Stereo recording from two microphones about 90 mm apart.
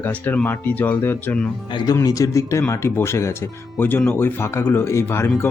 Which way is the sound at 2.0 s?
40° left (ahead or behind).